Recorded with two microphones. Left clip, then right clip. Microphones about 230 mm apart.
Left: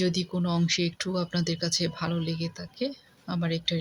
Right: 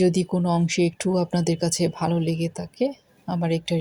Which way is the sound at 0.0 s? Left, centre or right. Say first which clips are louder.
Right 7 dB; centre.